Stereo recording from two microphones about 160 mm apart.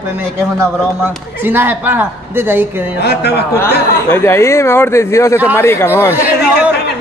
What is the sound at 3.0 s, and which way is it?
Speech, 90° left.